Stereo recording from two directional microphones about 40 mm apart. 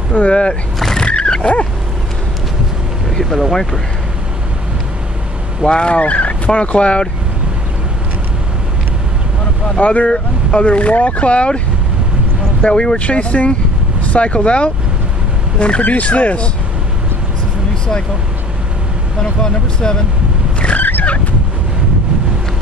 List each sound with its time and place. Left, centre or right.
0.3 s speech: left
0.7 s vehicle: centre
1.0 s vehicle: left
3.1 s speech: centre
5.7 s speech: left
9.8 s speech: left
10.0 s speech: left
12.6 s speech: left
15.8 s speech: left
19.4 s speech: centre
20.7 s vehicle: left